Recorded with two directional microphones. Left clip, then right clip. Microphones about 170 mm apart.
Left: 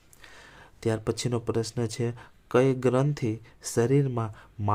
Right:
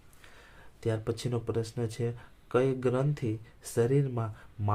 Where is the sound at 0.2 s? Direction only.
40° left (ahead or behind).